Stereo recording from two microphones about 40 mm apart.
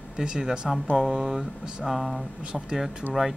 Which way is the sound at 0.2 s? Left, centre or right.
Centre.